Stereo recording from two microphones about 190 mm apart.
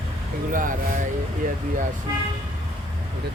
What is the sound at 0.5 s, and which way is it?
Speech, 45° right (ahead or behind).